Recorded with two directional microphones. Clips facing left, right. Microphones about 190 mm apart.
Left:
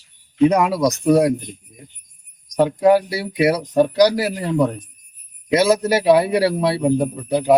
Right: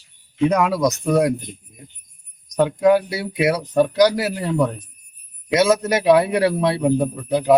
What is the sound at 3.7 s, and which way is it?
A man's voice, 15° left (ahead or behind).